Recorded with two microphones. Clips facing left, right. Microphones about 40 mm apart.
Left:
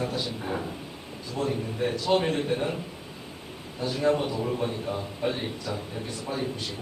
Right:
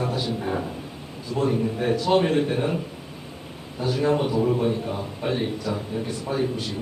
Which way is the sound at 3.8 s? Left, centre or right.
Centre.